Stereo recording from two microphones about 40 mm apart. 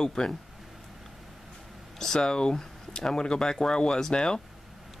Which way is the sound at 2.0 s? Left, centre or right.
Centre.